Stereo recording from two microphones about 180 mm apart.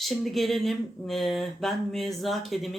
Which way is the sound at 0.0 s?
Centre (ahead or behind).